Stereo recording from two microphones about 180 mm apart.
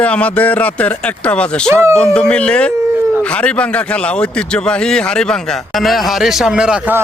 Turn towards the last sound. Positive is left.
turn(degrees=-5)  # may be behind; listen again after turning